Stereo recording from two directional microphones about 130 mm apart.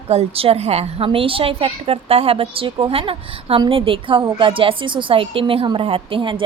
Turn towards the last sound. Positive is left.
turn(degrees=-40)  # may be behind; listen again after turning